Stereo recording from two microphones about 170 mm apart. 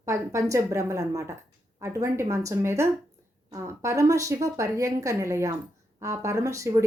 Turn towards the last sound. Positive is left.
turn(degrees=-15)  # may be behind; listen again after turning